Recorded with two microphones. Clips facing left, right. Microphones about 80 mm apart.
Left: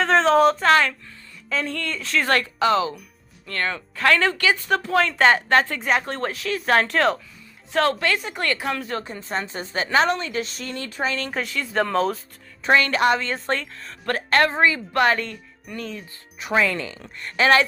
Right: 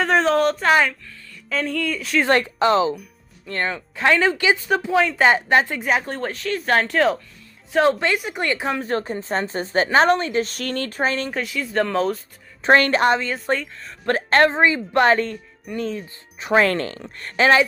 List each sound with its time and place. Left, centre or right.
0.0 s a sound: centre
0.7 s a woman's voice: centre
2.2 s speech: right
3.4 s a woman's voice: centre
5.8 s speech: centre
7.8 s speech: right
8.8 s a woman's voice: right
10.5 s speech: right
11.3 s speech: centre
12.6 s a woman's voice: right
13.2 s speech: centre
14.1 s a woman's voice: right
16.6 s speech: right
17.3 s speech: right